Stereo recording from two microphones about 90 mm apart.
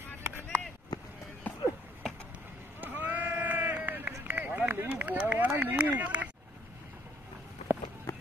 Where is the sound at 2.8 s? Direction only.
20° right (ahead or behind).